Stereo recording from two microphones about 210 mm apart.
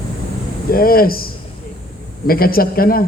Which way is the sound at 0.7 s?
45° left (ahead or behind).